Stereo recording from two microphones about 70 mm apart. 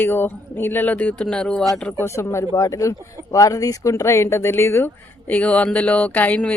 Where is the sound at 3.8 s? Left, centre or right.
Left.